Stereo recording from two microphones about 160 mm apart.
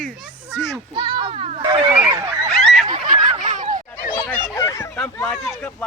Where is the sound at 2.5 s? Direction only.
Centre (ahead or behind).